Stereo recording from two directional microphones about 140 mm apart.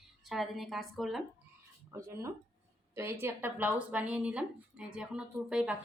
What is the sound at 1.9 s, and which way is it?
Speech, 20° right (ahead or behind).